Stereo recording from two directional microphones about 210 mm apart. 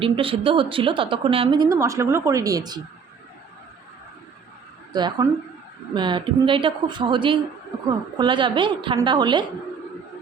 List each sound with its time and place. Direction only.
0.0 s a woman's voice: 25° right (ahead or behind)
4.9 s a woman's voice: 20° right (ahead or behind)